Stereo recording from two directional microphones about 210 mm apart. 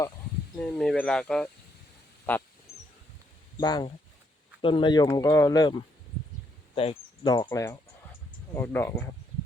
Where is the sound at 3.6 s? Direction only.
20° left (ahead or behind).